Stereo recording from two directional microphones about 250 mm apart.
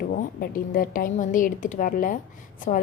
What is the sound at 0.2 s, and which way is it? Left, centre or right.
A woman's voice, left.